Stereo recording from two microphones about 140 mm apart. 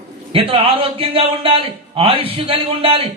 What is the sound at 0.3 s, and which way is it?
A man's voice, 40° right (ahead or behind).